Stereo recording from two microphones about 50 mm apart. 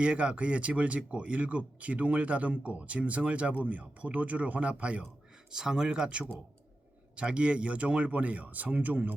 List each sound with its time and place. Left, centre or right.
0.0 s speech: centre
5.5 s speech: centre; by 9.0 s right